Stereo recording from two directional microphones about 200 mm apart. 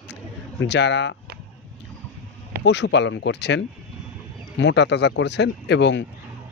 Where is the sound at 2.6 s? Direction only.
60° left (ahead or behind).